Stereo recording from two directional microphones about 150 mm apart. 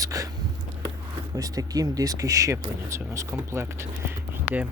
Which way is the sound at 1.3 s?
25° right (ahead or behind).